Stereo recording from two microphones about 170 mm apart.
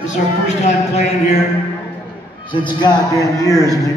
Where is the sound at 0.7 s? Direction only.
40° left (ahead or behind).